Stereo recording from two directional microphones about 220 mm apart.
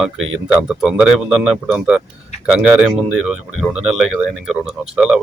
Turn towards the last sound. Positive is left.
turn(degrees=-5)  # may be behind; listen again after turning